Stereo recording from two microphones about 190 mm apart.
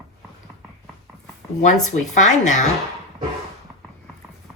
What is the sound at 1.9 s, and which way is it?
Speech, 40° left (ahead or behind).